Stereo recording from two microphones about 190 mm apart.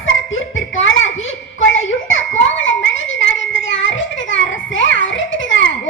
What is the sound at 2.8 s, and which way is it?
Child singing, 80° left.